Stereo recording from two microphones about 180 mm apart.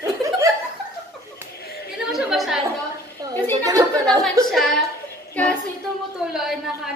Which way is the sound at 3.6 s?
20° right (ahead or behind).